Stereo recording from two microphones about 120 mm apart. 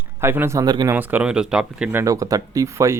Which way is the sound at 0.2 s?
20° right (ahead or behind).